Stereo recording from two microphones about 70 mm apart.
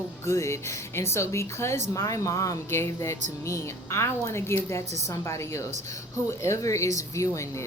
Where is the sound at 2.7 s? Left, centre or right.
Left.